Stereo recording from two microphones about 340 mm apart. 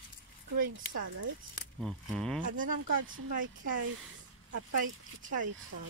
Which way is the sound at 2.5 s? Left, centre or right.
Right.